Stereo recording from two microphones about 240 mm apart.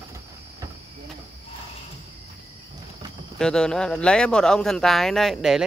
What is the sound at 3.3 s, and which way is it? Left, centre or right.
Speech, centre.